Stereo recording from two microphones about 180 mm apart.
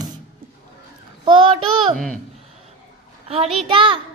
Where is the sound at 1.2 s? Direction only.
30° right (ahead or behind).